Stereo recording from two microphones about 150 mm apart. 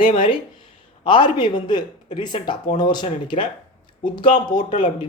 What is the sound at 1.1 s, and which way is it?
Speech, 35° left (ahead or behind).